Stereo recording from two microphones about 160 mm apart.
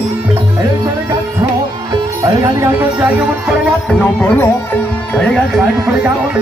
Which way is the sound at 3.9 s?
10° left (ahead or behind).